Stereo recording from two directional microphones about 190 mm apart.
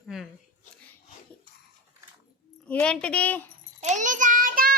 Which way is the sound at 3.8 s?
40° right (ahead or behind).